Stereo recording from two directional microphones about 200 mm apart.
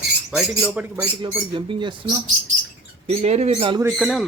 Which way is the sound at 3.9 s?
Centre (ahead or behind).